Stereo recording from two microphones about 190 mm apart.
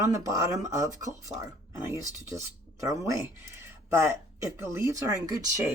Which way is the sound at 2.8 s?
15° right (ahead or behind).